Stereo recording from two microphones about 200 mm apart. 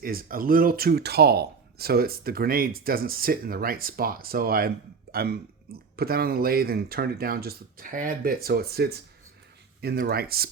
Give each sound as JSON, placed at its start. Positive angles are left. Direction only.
{"t": 0.0, "sound": "speech", "side_deg": -45}